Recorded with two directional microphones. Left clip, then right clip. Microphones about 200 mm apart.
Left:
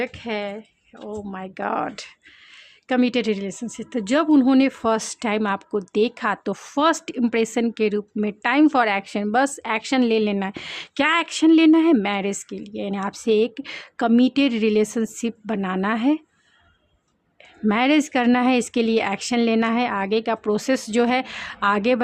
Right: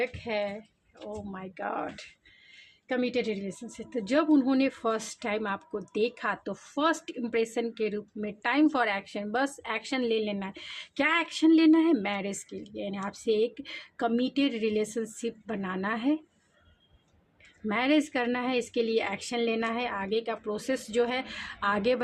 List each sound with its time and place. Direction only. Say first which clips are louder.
0.0 s speech: left 4 dB; 50° left (ahead or behind)
17.7 s speech: left 7 dB; 40° left (ahead or behind)